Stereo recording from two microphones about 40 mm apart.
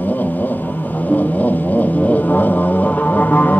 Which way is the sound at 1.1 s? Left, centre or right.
Left.